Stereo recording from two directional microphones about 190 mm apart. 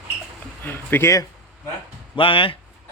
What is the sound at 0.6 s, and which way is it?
Speech, 10° left (ahead or behind).